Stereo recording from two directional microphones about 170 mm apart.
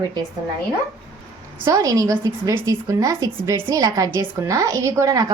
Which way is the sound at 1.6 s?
20° right (ahead or behind).